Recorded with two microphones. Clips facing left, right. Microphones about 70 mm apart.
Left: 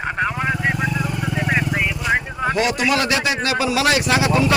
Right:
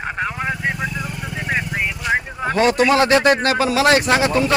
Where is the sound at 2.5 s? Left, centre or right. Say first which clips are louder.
Right 5 dB; right.